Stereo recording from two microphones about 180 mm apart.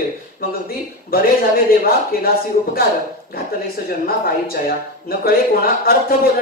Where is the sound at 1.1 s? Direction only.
55° left (ahead or behind).